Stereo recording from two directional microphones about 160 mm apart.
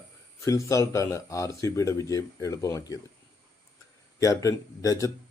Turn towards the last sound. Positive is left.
turn(degrees=20)  # may be behind; listen again after turning